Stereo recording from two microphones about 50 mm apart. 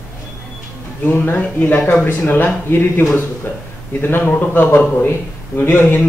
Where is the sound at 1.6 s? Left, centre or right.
Left.